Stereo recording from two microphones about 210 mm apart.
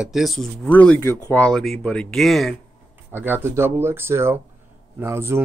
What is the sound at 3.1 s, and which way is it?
Speech, 10° right (ahead or behind).